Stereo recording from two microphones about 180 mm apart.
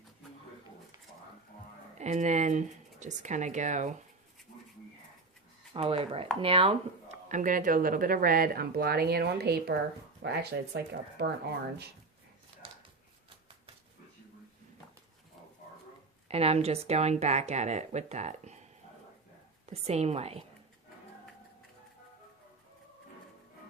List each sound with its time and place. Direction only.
2.0 s speech: 40° right (ahead or behind)
5.7 s speech: 30° right (ahead or behind)
7.3 s speech: 45° right (ahead or behind); by 11.3 s 65° right (ahead or behind)
16.3 s speech: 35° right (ahead or behind)
19.7 s speech: 35° right (ahead or behind)